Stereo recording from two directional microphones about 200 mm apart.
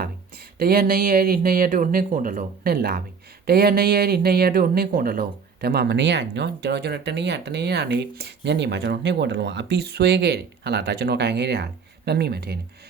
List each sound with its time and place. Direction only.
0.6 s speech: 50° right (ahead or behind)